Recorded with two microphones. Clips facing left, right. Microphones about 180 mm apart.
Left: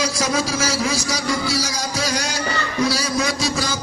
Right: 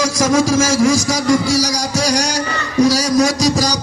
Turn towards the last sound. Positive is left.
turn(degrees=-40)  # may be behind; listen again after turning